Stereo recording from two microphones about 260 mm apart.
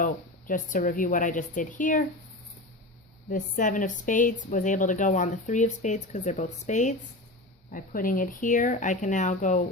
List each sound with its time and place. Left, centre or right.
0.0 s speech: left
3.2 s speech: left